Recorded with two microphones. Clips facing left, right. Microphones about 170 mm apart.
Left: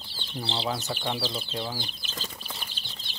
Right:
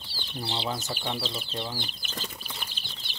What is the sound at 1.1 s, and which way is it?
Speech, 15° left (ahead or behind).